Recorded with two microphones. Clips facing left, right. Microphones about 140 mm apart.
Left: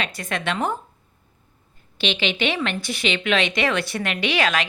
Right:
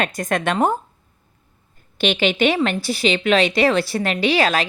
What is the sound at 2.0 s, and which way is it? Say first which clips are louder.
Speech: right 6 dB; 45° right (ahead or behind).